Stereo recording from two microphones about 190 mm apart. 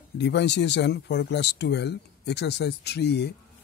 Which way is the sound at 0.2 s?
65° left (ahead or behind).